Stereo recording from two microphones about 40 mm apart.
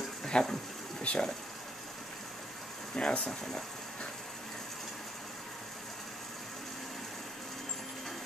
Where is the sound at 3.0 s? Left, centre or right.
Left.